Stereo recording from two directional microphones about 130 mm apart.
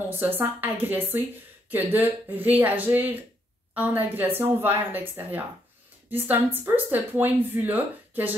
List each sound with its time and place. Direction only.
0.4 s speech: 15° right (ahead or behind)